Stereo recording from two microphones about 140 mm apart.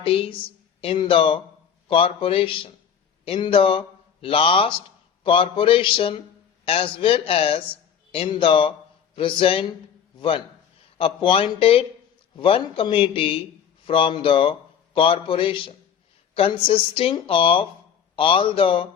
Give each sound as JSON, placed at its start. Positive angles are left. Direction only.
{"t": 0.0, "sound": "a man's voice", "side_deg": 40}